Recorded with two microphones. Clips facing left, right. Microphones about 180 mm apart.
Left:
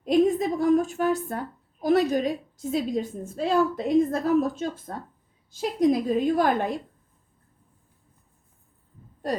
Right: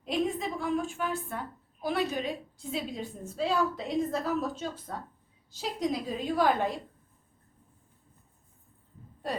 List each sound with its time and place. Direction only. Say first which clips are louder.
0.0 s a woman's voice: left 9 dB; 40° left (ahead or behind)